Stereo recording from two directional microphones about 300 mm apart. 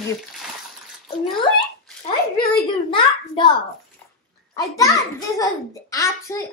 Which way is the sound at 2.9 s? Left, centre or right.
Centre.